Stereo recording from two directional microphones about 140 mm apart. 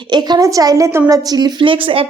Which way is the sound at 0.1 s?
30° right (ahead or behind).